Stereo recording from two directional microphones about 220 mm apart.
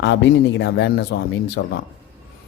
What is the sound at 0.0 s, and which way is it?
A man's voice, 55° left (ahead or behind).